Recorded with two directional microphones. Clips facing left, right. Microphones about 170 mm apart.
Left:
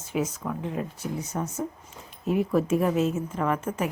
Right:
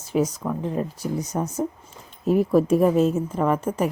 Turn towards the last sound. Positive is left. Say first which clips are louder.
# right 5 dB
turn(degrees=-35)  # may be behind; listen again after turning